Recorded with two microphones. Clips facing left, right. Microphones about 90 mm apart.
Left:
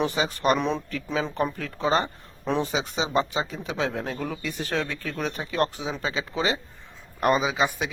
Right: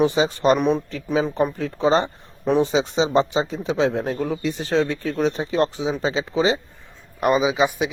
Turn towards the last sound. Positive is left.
turn(degrees=-15)  # may be behind; listen again after turning